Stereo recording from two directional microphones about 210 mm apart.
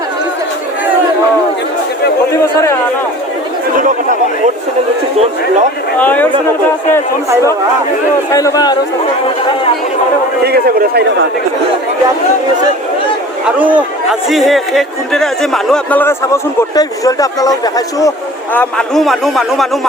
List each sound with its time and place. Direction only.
2.3 s speech: 15° left (ahead or behind)
6.0 s speech: 10° left (ahead or behind)
8.3 s speech: 15° left (ahead or behind)
10.4 s a man's voice: 50° right (ahead or behind)
13.6 s speech: 5° right (ahead or behind); by 18.1 s 15° left (ahead or behind)
18.5 s speech: 5° left (ahead or behind)